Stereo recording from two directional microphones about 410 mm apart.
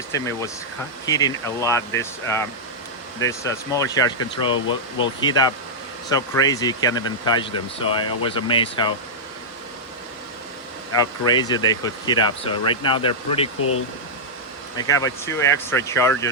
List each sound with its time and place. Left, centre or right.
0.1 s speech: centre
11.3 s speech: centre
13.6 s speech: left
14.8 s speech: centre